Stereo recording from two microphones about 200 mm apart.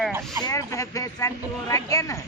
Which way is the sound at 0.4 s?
15° left (ahead or behind).